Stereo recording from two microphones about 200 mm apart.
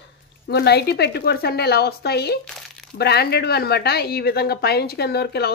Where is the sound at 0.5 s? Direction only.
55° left (ahead or behind).